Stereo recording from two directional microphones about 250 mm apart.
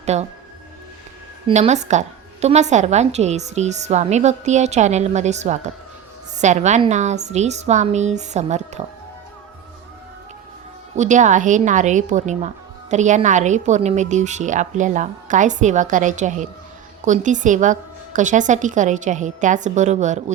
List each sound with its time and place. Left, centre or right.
0.0 s speech: right
1.5 s a woman's voice: right
10.9 s a woman's voice: right